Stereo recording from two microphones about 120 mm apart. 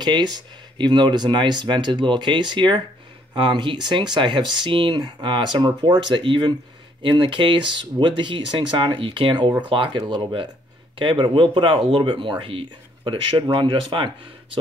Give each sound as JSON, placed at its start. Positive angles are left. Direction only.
{"t": 0.0, "sound": "speech", "side_deg": -35}